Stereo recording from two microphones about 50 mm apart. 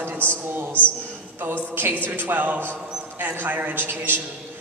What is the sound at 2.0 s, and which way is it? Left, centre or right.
A man's voice, right.